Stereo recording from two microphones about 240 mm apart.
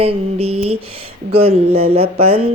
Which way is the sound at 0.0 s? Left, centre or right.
Right.